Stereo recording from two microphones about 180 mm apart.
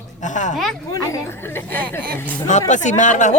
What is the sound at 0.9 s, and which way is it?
Chatter, 15° left (ahead or behind).